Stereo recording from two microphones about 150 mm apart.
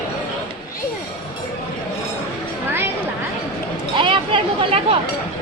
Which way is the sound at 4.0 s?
35° right (ahead or behind).